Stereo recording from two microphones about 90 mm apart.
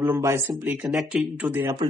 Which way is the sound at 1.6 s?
40° right (ahead or behind).